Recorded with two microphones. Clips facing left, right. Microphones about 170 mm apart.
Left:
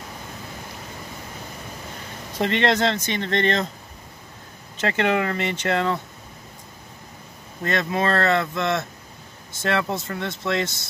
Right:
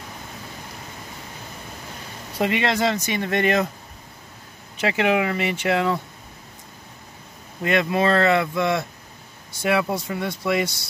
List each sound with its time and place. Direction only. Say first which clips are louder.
2.3 s speech: left 1 dB; 10° right (ahead or behind)
4.7 s speech: right 1 dB; 10° right (ahead or behind)
7.6 s speech: right 3 dB; 10° right (ahead or behind)